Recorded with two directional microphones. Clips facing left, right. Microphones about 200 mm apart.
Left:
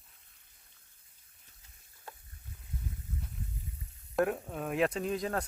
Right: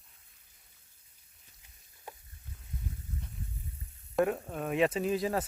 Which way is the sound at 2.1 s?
15° right (ahead or behind).